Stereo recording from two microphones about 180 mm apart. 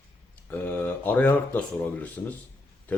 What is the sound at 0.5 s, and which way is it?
Speech, 10° left (ahead or behind).